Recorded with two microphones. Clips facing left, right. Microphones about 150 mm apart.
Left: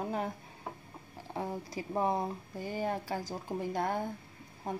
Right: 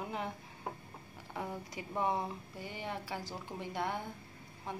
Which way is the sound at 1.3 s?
35° left (ahead or behind).